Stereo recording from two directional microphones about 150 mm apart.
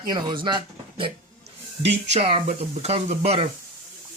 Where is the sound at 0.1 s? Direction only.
30° right (ahead or behind).